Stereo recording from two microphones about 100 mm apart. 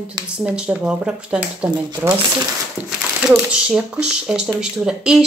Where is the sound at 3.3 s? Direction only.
10° right (ahead or behind).